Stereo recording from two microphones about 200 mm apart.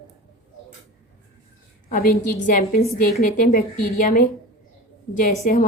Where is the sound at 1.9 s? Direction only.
45° left (ahead or behind).